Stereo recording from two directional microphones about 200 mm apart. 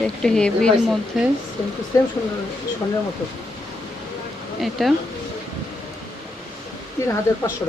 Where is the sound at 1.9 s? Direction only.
15° left (ahead or behind).